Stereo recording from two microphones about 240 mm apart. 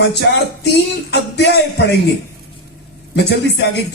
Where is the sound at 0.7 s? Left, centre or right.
Left.